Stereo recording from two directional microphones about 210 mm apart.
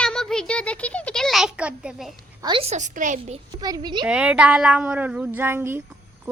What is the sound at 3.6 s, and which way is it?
Speech, 20° right (ahead or behind).